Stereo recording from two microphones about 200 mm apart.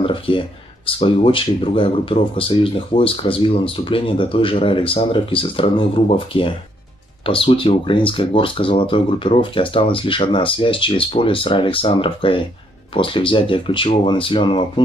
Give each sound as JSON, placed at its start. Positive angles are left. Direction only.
{"t": 0.0, "sound": "speech", "side_deg": 25}